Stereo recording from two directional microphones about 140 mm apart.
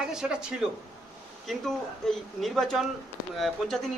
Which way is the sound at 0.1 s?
5° right (ahead or behind).